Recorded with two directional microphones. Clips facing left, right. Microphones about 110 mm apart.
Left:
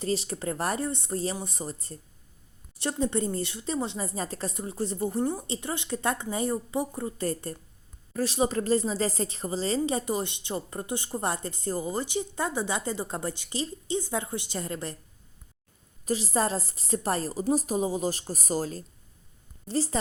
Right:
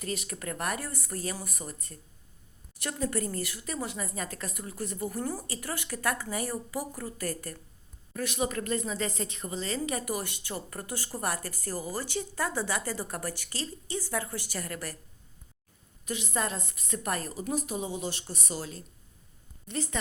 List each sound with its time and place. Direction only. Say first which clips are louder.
0.0 s a woman's voice: left 6 dB; 30° left (ahead or behind)
16.0 s a woman's voice: left 6 dB; 35° left (ahead or behind)